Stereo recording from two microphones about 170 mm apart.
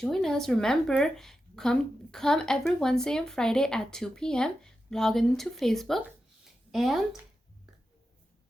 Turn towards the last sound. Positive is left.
turn(degrees=0)  # may be behind; listen again after turning